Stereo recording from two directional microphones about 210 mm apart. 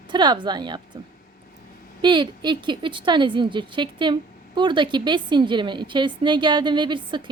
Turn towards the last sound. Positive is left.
turn(degrees=-20)  # may be behind; listen again after turning